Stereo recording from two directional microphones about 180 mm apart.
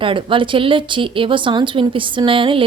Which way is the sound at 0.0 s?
30° right (ahead or behind).